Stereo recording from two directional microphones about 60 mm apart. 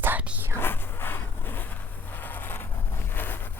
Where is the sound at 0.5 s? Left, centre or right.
Left.